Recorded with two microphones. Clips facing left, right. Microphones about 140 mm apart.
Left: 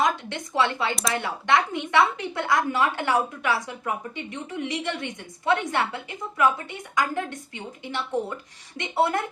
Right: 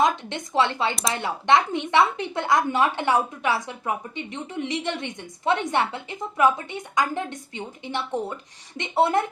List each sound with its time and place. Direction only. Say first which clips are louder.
0.0 s a woman's voice: right 2 dB; 25° right (ahead or behind)